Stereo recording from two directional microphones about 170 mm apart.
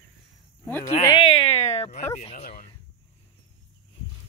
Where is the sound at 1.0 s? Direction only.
30° left (ahead or behind).